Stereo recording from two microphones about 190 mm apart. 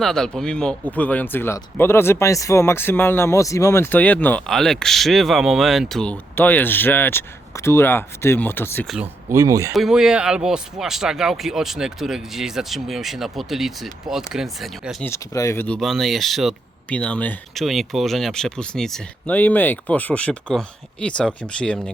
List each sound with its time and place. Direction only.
0.0 s speech: centre (ahead or behind)
9.3 s speech: 15° right (ahead or behind)
9.7 s speech: centre (ahead or behind)
15.0 s speech: 15° left (ahead or behind)